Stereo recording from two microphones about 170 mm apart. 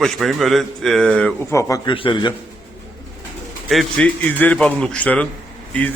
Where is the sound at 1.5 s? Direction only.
20° left (ahead or behind).